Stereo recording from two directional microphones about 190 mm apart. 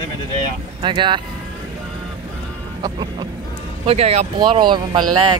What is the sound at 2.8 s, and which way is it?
Speech, 20° right (ahead or behind).